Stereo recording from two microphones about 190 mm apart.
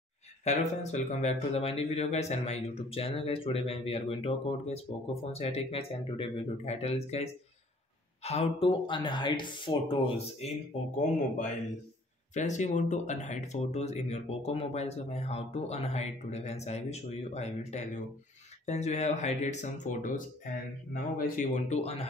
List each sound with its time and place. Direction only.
0.4 s a man's voice: 35° left (ahead or behind)
11.0 s a man's voice: 40° left (ahead or behind)